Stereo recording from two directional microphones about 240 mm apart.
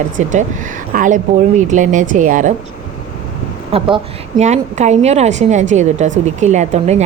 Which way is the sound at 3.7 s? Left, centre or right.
Right.